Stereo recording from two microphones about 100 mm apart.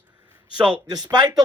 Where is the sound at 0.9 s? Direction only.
45° right (ahead or behind).